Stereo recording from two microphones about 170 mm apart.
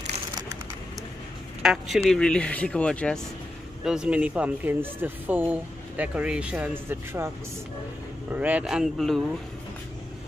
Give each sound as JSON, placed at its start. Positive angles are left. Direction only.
{"t": 1.6, "sound": "speech", "side_deg": -5}
{"t": 3.8, "sound": "speech", "side_deg": -5}
{"t": 8.3, "sound": "speech", "side_deg": -10}